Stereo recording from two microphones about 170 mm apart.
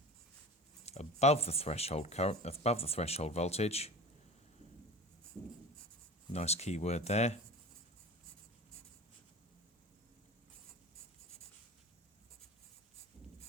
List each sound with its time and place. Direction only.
0.9 s speech: 40° left (ahead or behind)
6.3 s speech: 40° left (ahead or behind)